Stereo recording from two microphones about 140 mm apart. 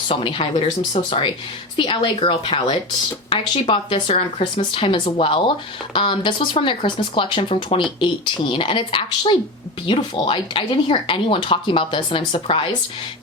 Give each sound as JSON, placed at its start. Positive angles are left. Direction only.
{"t": 0.1, "sound": "a woman's voice", "side_deg": 40}
{"t": 1.7, "sound": "a woman's voice", "side_deg": 35}